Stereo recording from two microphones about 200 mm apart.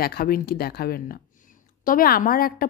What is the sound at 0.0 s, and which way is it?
A woman's voice, 50° left (ahead or behind).